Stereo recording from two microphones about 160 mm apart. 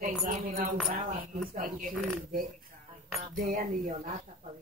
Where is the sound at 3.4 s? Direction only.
60° right (ahead or behind).